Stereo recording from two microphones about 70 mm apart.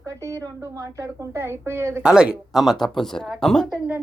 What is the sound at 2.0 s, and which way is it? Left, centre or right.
Speech, centre.